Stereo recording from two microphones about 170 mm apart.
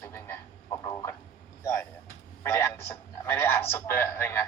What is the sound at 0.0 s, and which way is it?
Frog, 15° left (ahead or behind).